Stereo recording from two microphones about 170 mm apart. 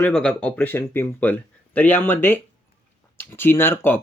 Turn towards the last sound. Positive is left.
turn(degrees=10)  # may be behind; listen again after turning